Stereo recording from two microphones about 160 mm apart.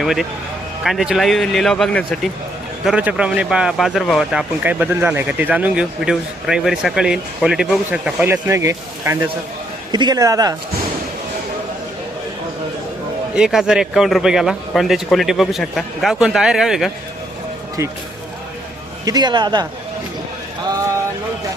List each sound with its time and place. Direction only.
0.0 s a man's voice: centre (ahead or behind)
2.8 s speech: 10° right (ahead or behind)
13.3 s a man's voice: 5° right (ahead or behind)
19.0 s speech: 25° right (ahead or behind)